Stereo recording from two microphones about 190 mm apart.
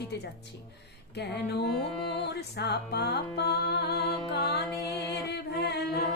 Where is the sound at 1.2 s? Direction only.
60° left (ahead or behind).